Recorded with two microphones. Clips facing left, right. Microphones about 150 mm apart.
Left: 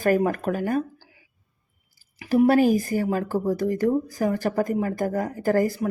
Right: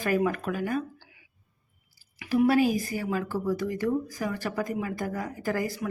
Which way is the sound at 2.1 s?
40° left (ahead or behind).